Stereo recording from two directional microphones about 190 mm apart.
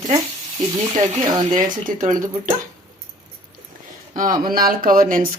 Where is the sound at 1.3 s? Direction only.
20° right (ahead or behind).